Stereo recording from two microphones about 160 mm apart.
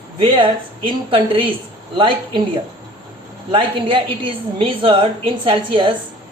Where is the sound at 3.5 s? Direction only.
30° right (ahead or behind).